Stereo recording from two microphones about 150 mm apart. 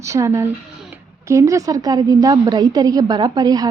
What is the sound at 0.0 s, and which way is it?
A woman's voice, 20° right (ahead or behind).